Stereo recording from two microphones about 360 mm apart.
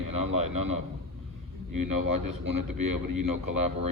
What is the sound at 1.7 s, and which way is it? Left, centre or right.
A man's voice, right.